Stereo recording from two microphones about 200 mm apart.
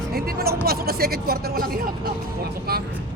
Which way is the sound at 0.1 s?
50° right (ahead or behind).